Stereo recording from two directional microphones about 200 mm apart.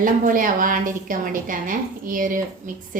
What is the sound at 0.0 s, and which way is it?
A woman's voice, 40° right (ahead or behind).